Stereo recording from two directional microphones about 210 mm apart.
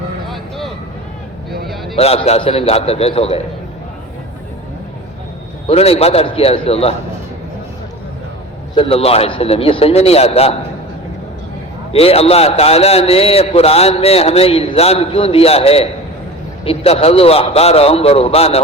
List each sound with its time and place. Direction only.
0.3 s vehicle: centre (ahead or behind)
2.0 s a man's voice: 30° left (ahead or behind)
5.6 s a man's voice: 30° left (ahead or behind)
8.7 s a man's voice: 25° left (ahead or behind)
11.9 s a man's voice: 30° left (ahead or behind)